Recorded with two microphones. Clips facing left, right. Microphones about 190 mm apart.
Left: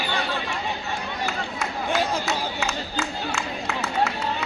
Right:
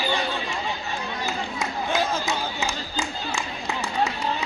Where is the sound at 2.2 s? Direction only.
15° right (ahead or behind).